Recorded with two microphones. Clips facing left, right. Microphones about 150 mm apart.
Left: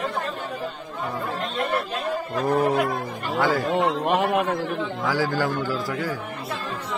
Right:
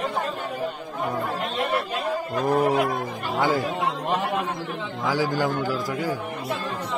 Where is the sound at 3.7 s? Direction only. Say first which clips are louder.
Left 4 dB; 65° left (ahead or behind).